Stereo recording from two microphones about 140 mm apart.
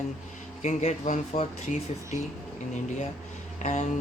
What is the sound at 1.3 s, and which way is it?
Speech, 80° left.